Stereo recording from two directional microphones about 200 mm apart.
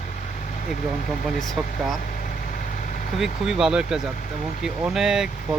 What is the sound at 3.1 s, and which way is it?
Speech, centre (ahead or behind).